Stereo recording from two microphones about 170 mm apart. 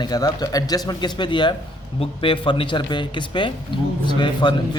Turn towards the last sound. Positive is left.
turn(degrees=25)  # may be behind; listen again after turning